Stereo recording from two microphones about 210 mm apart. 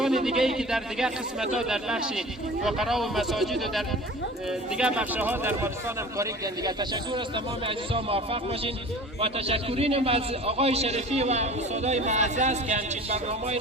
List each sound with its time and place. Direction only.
0.0 s a man's voice: centre (ahead or behind); by 13.6 s 30° right (ahead or behind)